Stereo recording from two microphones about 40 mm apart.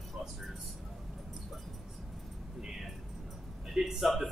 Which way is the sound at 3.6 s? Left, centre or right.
Centre.